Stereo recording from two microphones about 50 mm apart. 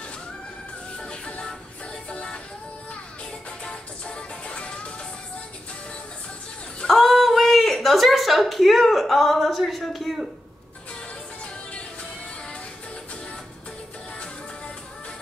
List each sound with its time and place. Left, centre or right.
0.9 s music: centre
3.6 s music: centre
6.9 s a sound: centre